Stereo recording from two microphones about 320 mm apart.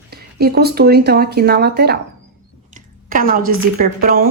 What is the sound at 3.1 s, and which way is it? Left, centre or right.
A woman's voice, right.